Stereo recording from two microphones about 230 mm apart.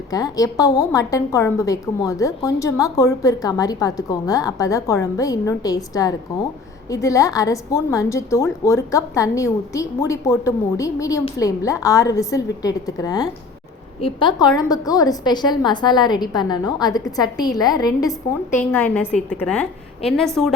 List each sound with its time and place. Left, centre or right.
0.1 s a woman's voice: centre